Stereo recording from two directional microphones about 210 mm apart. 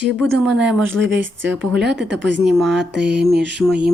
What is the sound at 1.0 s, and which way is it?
Speech, 60° right (ahead or behind).